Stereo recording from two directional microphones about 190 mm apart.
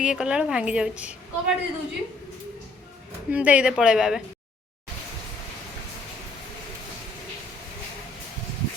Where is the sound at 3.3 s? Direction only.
10° right (ahead or behind).